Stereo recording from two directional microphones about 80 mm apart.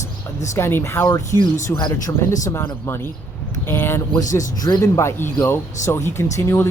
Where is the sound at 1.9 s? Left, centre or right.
Left.